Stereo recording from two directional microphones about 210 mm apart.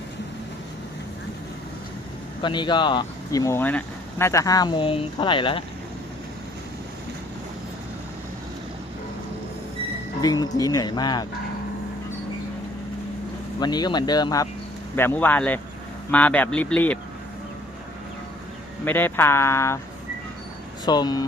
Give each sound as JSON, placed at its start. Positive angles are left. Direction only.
{"t": 2.4, "sound": "speech", "side_deg": 20}
{"t": 10.2, "sound": "speech", "side_deg": 20}
{"t": 13.6, "sound": "speech", "side_deg": 20}
{"t": 18.9, "sound": "speech", "side_deg": 10}
{"t": 20.8, "sound": "speech", "side_deg": 20}